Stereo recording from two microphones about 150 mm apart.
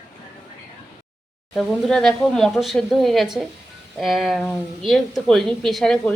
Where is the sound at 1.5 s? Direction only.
Centre (ahead or behind).